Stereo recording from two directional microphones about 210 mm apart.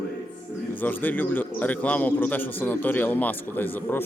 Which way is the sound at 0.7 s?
10° left (ahead or behind).